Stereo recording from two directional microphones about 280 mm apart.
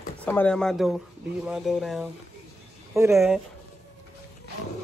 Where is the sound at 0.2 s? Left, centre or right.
Centre.